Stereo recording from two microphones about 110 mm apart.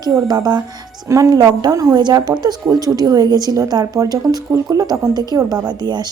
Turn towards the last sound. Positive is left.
turn(degrees=-40)  # may be behind; listen again after turning